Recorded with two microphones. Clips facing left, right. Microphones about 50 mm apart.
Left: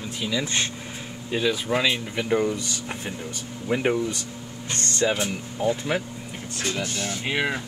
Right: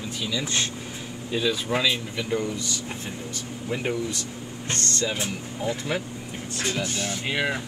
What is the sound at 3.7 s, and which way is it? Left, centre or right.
Speech, left.